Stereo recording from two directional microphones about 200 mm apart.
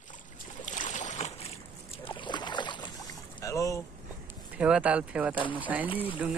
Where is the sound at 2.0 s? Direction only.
25° left (ahead or behind).